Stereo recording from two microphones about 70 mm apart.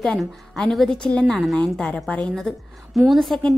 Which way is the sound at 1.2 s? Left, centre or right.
Centre.